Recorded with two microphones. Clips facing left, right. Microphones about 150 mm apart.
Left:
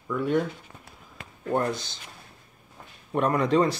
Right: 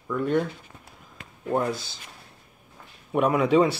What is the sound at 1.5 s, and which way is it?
Speech, 5° right (ahead or behind).